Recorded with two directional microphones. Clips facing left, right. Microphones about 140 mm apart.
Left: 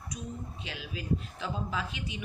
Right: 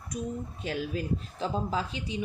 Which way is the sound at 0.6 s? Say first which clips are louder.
Right 8 dB; 45° right (ahead or behind).